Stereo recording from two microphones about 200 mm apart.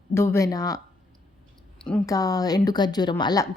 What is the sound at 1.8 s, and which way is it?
Speech, 5° left (ahead or behind).